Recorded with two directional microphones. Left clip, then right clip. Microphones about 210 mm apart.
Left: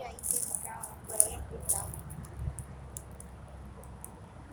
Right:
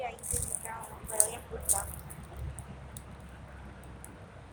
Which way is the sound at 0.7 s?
30° right (ahead or behind).